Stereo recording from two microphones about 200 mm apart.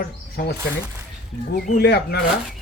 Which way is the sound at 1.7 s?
55° left (ahead or behind).